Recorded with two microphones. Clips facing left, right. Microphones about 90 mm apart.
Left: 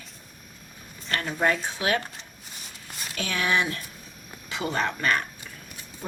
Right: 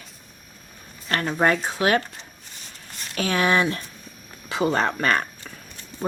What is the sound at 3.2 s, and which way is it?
Speech, 40° right (ahead or behind).